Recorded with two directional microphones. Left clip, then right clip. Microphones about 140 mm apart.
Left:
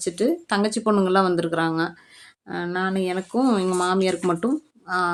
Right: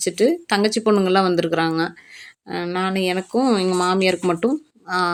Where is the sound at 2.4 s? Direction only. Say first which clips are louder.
Right 2 dB; 25° right (ahead or behind).